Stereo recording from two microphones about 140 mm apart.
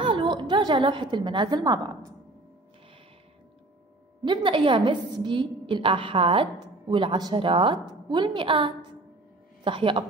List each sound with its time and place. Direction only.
0.0 s a woman's voice: 35° right (ahead or behind)
4.2 s a woman's voice: 35° right (ahead or behind)